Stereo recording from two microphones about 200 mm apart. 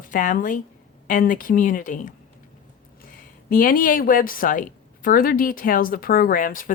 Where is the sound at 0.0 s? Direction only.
40° left (ahead or behind).